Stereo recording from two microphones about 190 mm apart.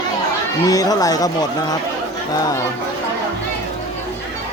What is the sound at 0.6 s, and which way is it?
Speech, 20° left (ahead or behind).